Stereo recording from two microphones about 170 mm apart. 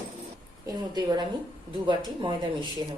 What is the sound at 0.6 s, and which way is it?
Speech, 25° right (ahead or behind).